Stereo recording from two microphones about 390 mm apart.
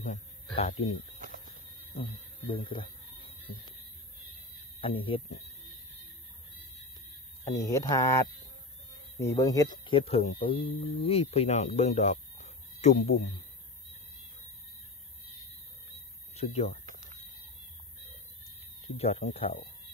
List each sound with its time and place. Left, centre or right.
0.6 s speech: centre
2.5 s speech: centre
4.8 s speech: centre
7.4 s speech: centre
9.2 s speech: centre
16.3 s speech: centre
18.9 s speech: centre